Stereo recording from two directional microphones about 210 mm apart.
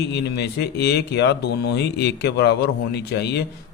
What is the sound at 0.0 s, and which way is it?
Speech, 55° left (ahead or behind).